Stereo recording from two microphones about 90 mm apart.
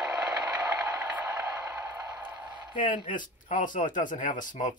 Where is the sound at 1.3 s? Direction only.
35° right (ahead or behind).